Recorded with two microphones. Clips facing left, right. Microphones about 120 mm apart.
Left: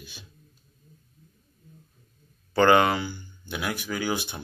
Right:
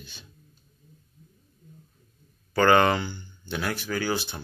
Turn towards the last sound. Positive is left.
turn(degrees=15)  # may be behind; listen again after turning